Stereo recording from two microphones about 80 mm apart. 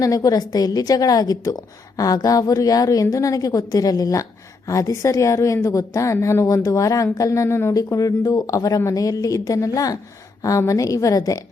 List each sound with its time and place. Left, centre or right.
0.0 s a woman's voice: left
7.7 s a woman's voice: left